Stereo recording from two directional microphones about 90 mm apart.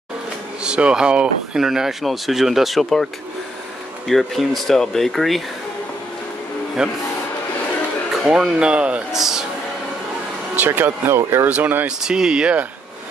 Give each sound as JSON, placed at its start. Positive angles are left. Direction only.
{"t": 0.7, "sound": "speech", "side_deg": -10}
{"t": 4.1, "sound": "speech", "side_deg": 0}
{"t": 6.8, "sound": "speech", "side_deg": -10}
{"t": 8.3, "sound": "speech", "side_deg": -10}
{"t": 10.5, "sound": "speech", "side_deg": -20}
{"t": 11.5, "sound": "speech", "side_deg": -20}
{"t": 12.0, "sound": "speech", "side_deg": -10}